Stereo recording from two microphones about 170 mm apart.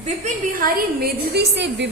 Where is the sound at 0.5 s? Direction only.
60° right (ahead or behind); by 1.9 s 90° right.